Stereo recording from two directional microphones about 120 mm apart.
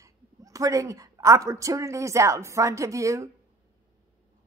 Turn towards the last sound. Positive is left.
turn(degrees=-25)  # may be behind; listen again after turning